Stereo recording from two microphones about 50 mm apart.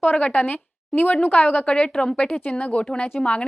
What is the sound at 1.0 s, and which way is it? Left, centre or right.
A woman's voice, left.